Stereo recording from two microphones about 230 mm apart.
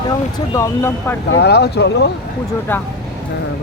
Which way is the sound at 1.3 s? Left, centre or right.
Left.